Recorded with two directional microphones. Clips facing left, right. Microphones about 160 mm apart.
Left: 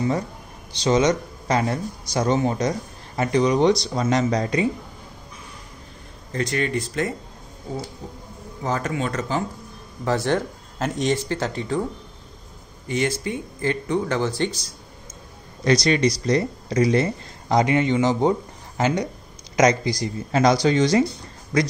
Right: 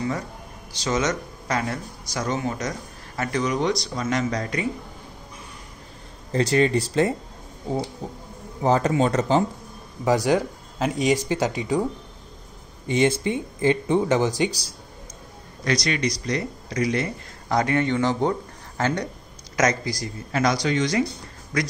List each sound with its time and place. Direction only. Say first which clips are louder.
0.7 s speech: left 5 dB; 25° left (ahead or behind)
6.3 s speech: right 4 dB; 30° right (ahead or behind)
8.6 s speech: right 5 dB; 30° right (ahead or behind)
10.0 s speech: right 2 dB; 15° right (ahead or behind)
15.6 s speech: left 5 dB; 25° left (ahead or behind)
17.5 s speech: left 3 dB; 20° left (ahead or behind)